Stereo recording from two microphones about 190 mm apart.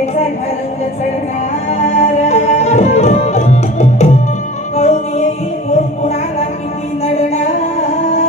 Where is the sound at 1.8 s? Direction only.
35° left (ahead or behind).